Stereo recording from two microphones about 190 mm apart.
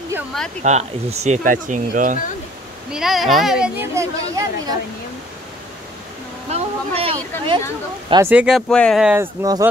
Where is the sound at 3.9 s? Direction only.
20° right (ahead or behind).